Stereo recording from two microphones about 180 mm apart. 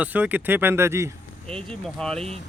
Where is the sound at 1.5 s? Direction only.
5° left (ahead or behind).